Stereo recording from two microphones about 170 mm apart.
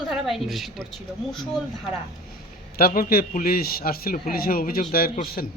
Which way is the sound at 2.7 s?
60° left (ahead or behind).